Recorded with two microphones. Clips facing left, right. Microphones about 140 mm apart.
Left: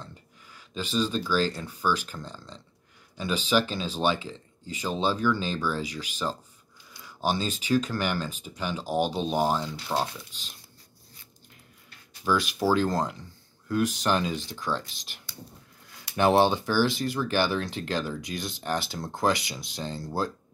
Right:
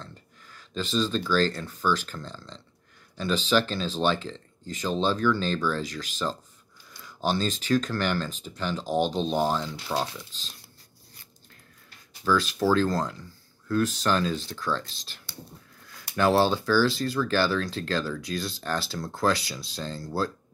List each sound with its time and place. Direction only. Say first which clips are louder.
0.0 s speech: even; 10° left (ahead or behind)
12.3 s speech: right 1 dB; 15° left (ahead or behind)